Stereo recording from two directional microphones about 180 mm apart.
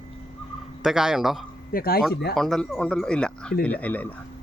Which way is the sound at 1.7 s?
55° left (ahead or behind).